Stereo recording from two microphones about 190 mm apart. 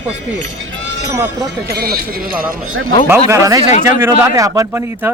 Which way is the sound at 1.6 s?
55° right (ahead or behind).